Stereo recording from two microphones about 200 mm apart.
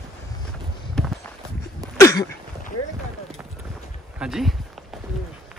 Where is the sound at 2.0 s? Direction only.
15° left (ahead or behind).